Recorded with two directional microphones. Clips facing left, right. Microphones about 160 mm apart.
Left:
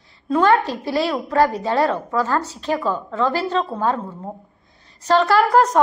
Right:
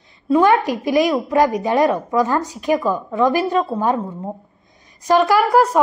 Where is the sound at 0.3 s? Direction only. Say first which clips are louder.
Right 2 dB; 15° right (ahead or behind).